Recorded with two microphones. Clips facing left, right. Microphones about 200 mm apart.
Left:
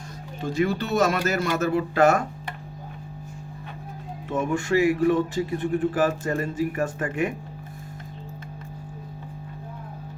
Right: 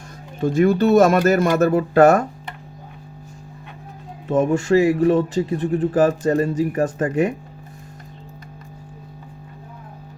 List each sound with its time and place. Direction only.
0.4 s speech: 50° right (ahead or behind)
4.3 s speech: 40° right (ahead or behind)